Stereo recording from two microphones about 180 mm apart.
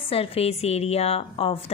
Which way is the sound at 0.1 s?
30° left (ahead or behind).